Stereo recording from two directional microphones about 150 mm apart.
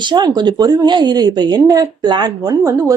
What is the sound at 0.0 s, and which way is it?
Speech, 30° right (ahead or behind).